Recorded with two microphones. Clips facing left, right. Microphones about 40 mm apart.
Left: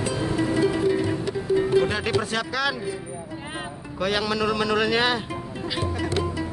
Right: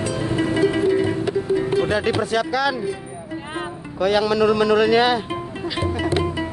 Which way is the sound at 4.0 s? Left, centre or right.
Centre.